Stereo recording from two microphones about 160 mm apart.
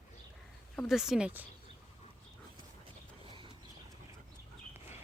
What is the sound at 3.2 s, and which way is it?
Clip-clop, 30° right (ahead or behind).